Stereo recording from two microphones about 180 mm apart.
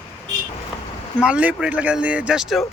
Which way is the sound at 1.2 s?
5° right (ahead or behind).